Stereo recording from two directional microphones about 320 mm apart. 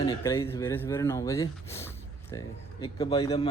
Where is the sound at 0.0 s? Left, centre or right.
Centre.